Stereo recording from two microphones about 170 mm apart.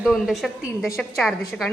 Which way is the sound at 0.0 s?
Centre (ahead or behind).